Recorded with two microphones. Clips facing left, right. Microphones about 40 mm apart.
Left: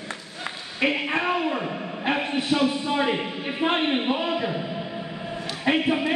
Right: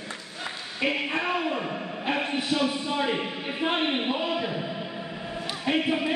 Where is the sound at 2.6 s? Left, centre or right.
Left.